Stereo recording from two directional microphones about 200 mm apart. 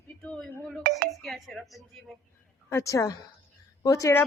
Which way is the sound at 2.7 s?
15° left (ahead or behind).